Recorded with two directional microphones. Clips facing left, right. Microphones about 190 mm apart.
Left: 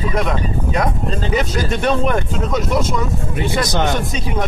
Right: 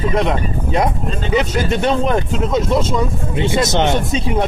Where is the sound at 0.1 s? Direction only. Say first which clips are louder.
Right 2 dB; 25° right (ahead or behind).